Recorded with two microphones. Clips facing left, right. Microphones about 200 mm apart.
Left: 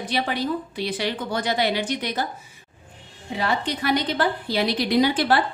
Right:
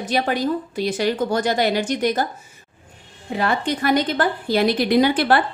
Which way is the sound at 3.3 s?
50° right (ahead or behind).